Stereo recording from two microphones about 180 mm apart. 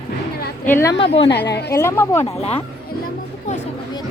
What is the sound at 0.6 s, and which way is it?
Speech, 15° left (ahead or behind).